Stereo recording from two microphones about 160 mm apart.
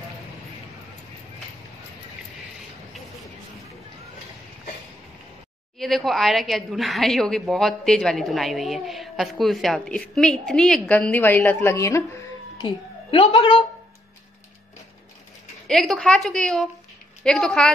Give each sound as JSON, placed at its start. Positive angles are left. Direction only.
{"t": 5.8, "sound": "a woman's voice", "side_deg": 0}
{"t": 12.5, "sound": "a woman's voice", "side_deg": 30}
{"t": 15.6, "sound": "a woman's voice", "side_deg": 0}